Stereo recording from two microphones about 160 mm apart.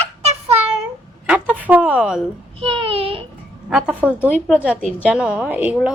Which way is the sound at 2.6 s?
35° right (ahead or behind).